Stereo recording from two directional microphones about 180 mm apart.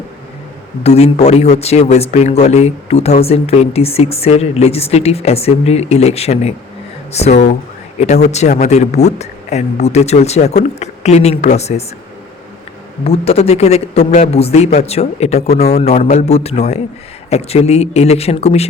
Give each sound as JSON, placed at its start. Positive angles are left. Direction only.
{"t": 0.8, "sound": "speech", "side_deg": 35}
{"t": 13.1, "sound": "speech", "side_deg": 35}